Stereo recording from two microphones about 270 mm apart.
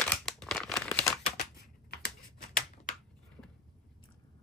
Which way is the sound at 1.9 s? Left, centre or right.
Left.